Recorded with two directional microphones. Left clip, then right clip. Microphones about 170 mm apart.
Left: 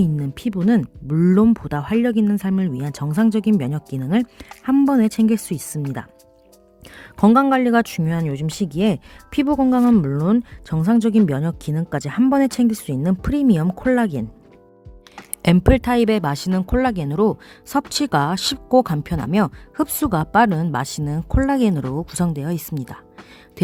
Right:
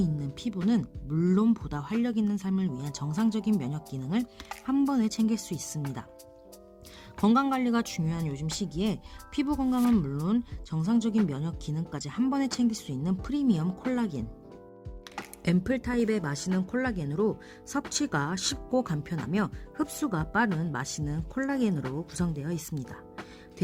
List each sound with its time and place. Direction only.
0.0 s a woman's voice: 45° left (ahead or behind)
4.2 s speech: centre (ahead or behind)
4.9 s speech: 45° left (ahead or behind)
6.9 s speech: 45° left (ahead or behind)
15.4 s speech: 60° left (ahead or behind); by 23.0 s 45° left (ahead or behind)